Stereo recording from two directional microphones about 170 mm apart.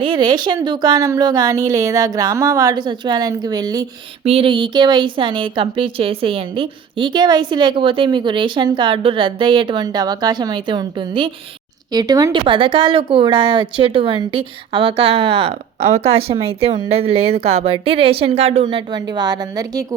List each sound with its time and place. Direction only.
0.0 s speech: 25° right (ahead or behind)
4.2 s speech: 35° right (ahead or behind)
18.6 s speech: 25° right (ahead or behind)